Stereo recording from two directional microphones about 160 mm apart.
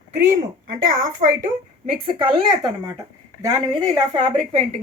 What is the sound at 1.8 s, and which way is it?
A woman's voice, 35° right (ahead or behind).